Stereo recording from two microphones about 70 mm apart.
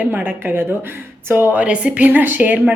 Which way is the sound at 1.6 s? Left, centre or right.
Centre.